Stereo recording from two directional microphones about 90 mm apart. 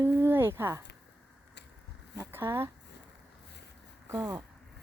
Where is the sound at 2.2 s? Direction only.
25° right (ahead or behind).